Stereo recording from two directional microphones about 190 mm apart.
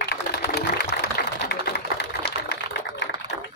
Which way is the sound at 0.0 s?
60° left (ahead or behind).